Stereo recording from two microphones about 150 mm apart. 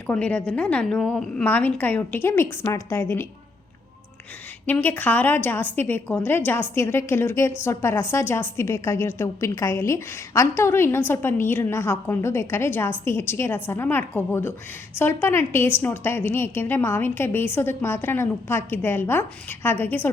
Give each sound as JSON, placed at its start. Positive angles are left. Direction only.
{"t": 0.1, "sound": "a woman's voice", "side_deg": 10}
{"t": 4.6, "sound": "a woman's voice", "side_deg": 10}